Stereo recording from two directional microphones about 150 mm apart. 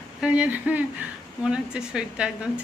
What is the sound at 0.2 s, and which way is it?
Speech, 5° right (ahead or behind).